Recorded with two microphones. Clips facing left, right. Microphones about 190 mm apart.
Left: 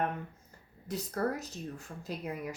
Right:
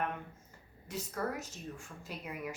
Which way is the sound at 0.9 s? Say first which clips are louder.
Left 4 dB; 35° left (ahead or behind).